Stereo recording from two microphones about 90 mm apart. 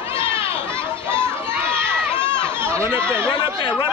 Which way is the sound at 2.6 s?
25° right (ahead or behind).